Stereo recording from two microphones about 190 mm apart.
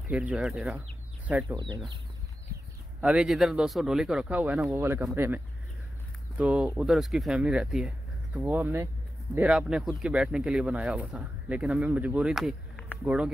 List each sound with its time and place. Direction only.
0.1 s speech: 5° right (ahead or behind)
3.0 s speech: 5° right (ahead or behind)
13.0 s speech: 5° right (ahead or behind)